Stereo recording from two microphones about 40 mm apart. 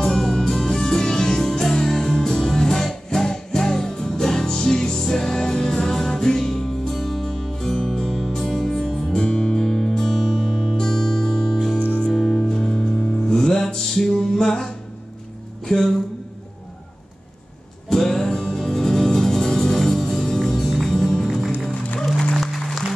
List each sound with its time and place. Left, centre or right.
0.0 s music: centre
15.6 s a sound: centre
17.8 s music: centre
22.3 s music: centre